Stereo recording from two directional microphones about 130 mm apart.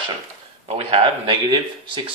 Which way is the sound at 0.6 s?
50° right (ahead or behind).